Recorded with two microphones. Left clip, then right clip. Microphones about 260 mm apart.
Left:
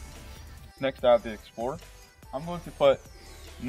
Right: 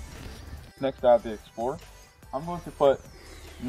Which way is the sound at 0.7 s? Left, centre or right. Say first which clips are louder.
Right 1 dB; left.